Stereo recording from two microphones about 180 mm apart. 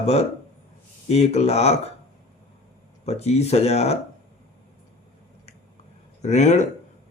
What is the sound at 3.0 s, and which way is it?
Speech, 35° left (ahead or behind).